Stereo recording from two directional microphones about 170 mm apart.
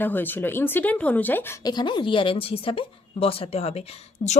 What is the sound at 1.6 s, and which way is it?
A woman's voice, 25° left (ahead or behind).